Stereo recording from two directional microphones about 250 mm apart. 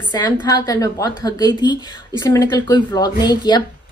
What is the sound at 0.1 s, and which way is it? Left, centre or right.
A woman's voice, centre.